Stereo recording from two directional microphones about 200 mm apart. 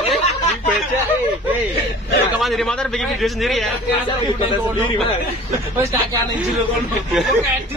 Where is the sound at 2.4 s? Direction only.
Centre (ahead or behind).